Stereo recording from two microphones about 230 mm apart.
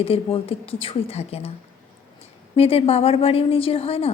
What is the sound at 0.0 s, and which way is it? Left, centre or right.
A woman's voice, left.